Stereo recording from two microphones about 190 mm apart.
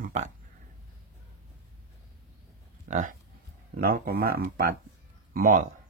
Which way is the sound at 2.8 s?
45° right (ahead or behind).